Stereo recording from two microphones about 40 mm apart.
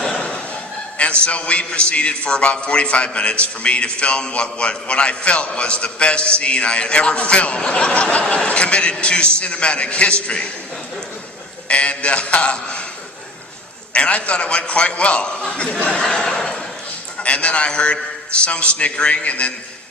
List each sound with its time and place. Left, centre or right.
0.2 s thump: left
0.9 s a man's voice: left
11.7 s a man's voice: left
13.9 s a man's voice: left
16.0 s speech: centre
17.2 s a man's voice: left